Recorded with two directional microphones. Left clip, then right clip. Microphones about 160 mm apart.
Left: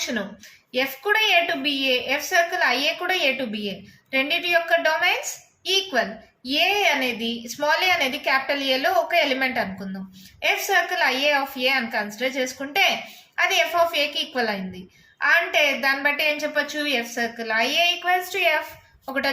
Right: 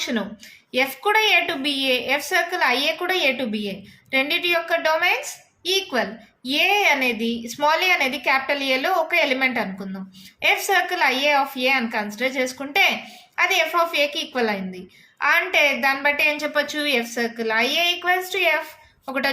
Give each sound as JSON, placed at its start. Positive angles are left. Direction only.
{"t": 0.7, "sound": "a woman's voice", "side_deg": -40}